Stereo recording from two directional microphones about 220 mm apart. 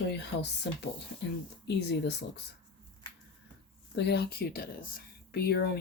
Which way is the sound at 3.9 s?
50° left (ahead or behind).